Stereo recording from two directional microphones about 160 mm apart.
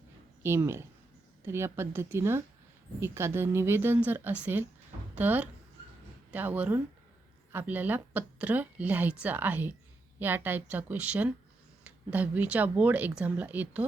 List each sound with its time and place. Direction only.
0.4 s a woman's voice: 15° right (ahead or behind)